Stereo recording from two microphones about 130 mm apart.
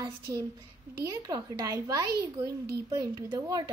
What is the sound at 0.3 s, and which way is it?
Speech, 25° right (ahead or behind).